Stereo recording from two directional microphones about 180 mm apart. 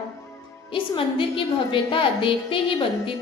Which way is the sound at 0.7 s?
30° left (ahead or behind).